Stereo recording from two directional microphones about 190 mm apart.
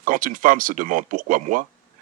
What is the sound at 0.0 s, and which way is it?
Speech, 45° right (ahead or behind).